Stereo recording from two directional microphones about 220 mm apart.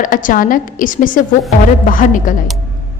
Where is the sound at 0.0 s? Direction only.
35° left (ahead or behind).